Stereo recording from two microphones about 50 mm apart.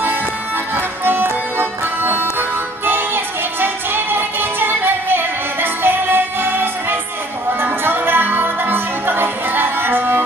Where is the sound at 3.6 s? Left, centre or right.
Right.